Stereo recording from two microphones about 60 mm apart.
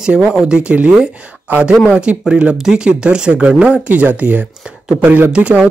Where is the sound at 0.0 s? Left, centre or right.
Centre.